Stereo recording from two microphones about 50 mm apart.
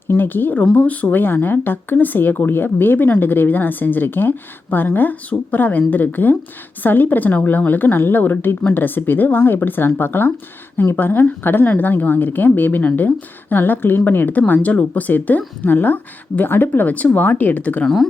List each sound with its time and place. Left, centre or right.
0.1 s speech: left